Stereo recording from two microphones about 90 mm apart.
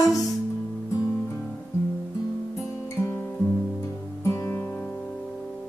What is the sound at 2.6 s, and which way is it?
Guitar, 30° left (ahead or behind).